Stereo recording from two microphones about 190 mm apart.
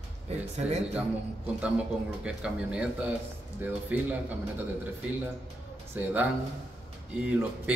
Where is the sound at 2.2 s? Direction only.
5° right (ahead or behind).